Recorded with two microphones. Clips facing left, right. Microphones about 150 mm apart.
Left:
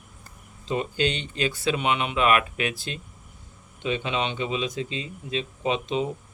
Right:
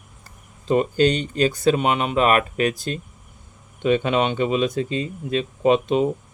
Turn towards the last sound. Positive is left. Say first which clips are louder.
# right 8 dB
turn(degrees=-50)  # may be behind; listen again after turning